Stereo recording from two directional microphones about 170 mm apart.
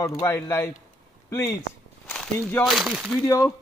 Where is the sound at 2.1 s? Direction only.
5° left (ahead or behind).